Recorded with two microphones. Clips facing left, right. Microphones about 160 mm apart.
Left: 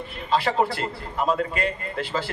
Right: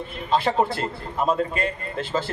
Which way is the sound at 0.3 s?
20° right (ahead or behind).